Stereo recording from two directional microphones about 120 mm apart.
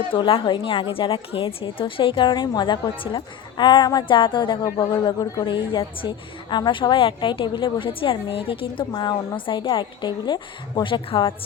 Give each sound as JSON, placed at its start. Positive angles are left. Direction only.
{"t": 0.1, "sound": "a woman's voice", "side_deg": 45}